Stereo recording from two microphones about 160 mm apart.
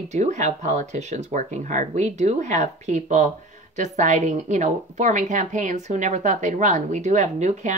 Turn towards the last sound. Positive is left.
turn(degrees=-45)  # may be behind; listen again after turning